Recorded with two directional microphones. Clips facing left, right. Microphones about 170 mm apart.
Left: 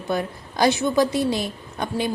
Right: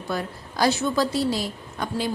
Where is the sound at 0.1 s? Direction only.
20° left (ahead or behind).